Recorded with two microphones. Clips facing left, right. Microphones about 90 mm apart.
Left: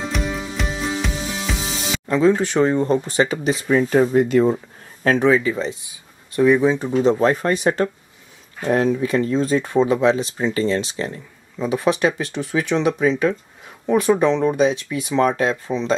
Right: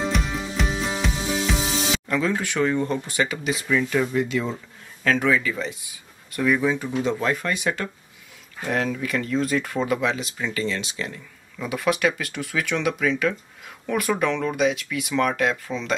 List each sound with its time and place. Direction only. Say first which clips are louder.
0.1 s music: left 2 dB; centre (ahead or behind)
2.0 s a man's voice: left 12 dB; 25° left (ahead or behind)
5.3 s speech: left 5 dB; 25° left (ahead or behind)